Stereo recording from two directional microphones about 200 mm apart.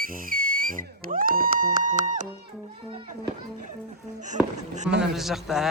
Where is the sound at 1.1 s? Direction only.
45° right (ahead or behind).